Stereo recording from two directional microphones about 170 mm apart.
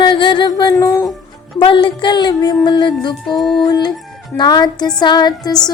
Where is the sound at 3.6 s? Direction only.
25° left (ahead or behind).